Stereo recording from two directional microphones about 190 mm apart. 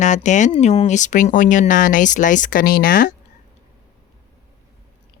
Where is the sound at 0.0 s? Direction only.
40° left (ahead or behind).